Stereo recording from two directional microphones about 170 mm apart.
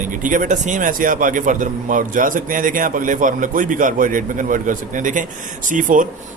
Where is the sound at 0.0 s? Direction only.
50° right (ahead or behind).